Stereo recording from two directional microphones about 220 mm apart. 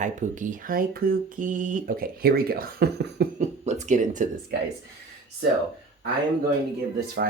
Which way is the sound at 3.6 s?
30° right (ahead or behind).